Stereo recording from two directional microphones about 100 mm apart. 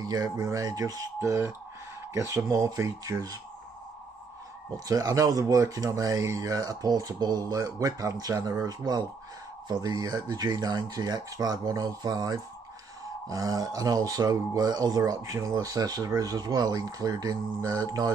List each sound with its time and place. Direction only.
0.0 s speech: 40° right (ahead or behind)
4.7 s speech: 35° right (ahead or behind)